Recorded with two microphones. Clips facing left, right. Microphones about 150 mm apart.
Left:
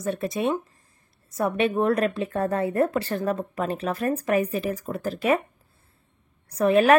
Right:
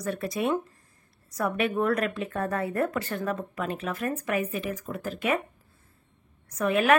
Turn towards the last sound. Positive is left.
turn(degrees=35)  # may be behind; listen again after turning